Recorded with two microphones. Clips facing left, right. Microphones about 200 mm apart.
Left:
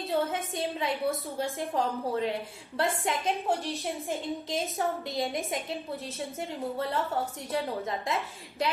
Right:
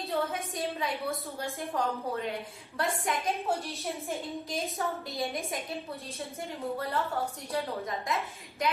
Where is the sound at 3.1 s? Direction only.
25° left (ahead or behind).